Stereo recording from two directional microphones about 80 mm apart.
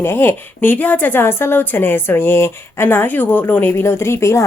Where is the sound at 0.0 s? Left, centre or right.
Left.